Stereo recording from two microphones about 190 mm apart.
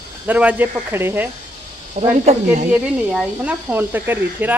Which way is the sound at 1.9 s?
35° right (ahead or behind).